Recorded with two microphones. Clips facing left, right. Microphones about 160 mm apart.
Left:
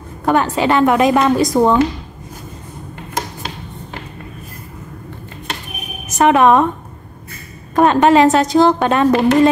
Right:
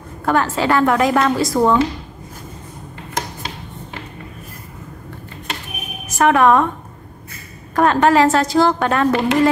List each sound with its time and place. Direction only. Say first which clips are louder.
0.2 s a woman's voice: left 3 dB; 20° left (ahead or behind)
6.1 s a woman's voice: left 2 dB; 20° left (ahead or behind)
7.7 s a woman's voice: left 3 dB; 20° left (ahead or behind)